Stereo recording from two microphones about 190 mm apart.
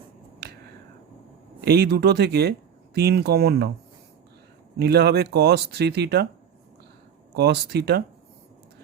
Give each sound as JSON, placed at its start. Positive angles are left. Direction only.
{"t": 1.6, "sound": "speech", "side_deg": -55}
{"t": 4.8, "sound": "speech", "side_deg": -60}
{"t": 7.3, "sound": "speech", "side_deg": -60}